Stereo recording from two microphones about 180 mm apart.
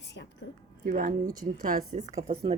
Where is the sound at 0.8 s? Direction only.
50° right (ahead or behind).